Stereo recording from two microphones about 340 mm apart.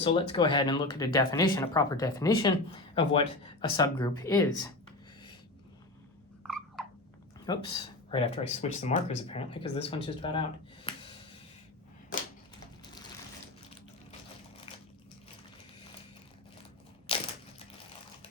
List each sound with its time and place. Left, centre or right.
0.0 s speech: centre
7.4 s speech: centre
12.8 s ratchet: centre